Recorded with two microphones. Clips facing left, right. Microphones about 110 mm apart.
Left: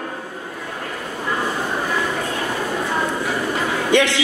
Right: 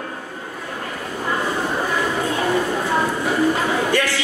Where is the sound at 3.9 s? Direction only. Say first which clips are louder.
Left 4 dB; 20° left (ahead or behind).